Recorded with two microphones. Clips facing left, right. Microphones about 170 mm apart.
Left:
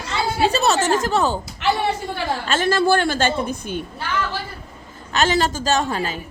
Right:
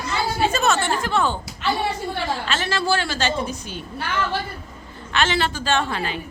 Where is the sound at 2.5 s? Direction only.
50° left (ahead or behind).